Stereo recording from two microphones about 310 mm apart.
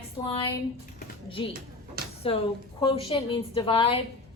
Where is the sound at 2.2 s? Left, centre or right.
Centre.